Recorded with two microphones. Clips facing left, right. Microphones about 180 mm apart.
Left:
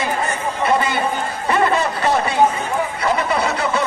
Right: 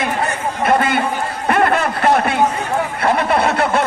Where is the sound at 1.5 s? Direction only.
55° right (ahead or behind).